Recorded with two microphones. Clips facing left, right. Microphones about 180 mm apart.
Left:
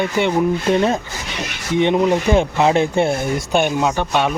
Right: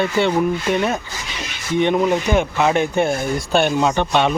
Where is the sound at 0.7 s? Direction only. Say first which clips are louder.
Left 3 dB; 30° left (ahead or behind).